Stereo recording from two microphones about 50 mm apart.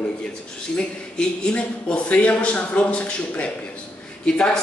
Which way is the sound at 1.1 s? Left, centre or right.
Centre.